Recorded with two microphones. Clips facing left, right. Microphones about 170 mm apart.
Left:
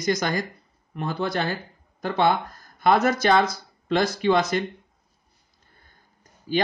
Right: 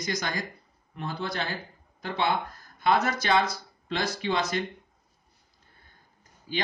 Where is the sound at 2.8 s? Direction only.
50° left (ahead or behind).